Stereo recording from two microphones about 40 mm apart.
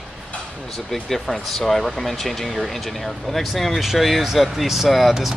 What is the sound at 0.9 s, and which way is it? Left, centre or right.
Speech, centre.